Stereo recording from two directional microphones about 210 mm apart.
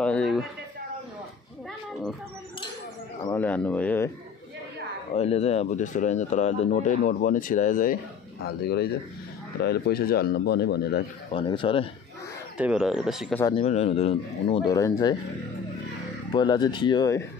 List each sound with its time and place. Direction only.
0.0 s a sound: 5° left (ahead or behind)
3.3 s speech: 5° left (ahead or behind)
5.1 s speech: 30° left (ahead or behind); by 11.1 s 50° left (ahead or behind)
11.3 s speech: 20° left (ahead or behind)
12.5 s speech: 5° right (ahead or behind)
13.6 s speech: 30° left (ahead or behind)
16.3 s speech: 20° left (ahead or behind)